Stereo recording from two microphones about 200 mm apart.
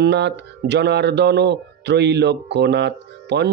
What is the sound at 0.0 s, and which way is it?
Speech, 60° right (ahead or behind).